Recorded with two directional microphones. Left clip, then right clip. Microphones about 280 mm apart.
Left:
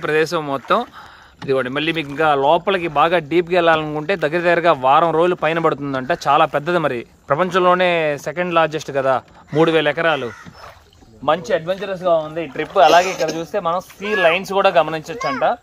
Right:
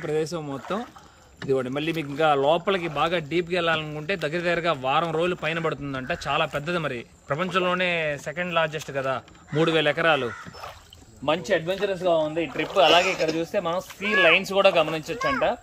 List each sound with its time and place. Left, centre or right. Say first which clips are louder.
0.0 s speech: left 9 dB; centre
13.0 s speech: left 4 dB; left
13.4 s speech: left 5 dB; centre